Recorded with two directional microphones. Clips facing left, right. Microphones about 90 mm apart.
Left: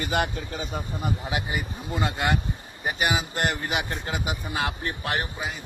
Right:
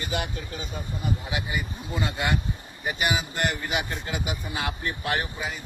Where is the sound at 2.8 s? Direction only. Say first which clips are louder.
Left 1 dB; 35° left (ahead or behind).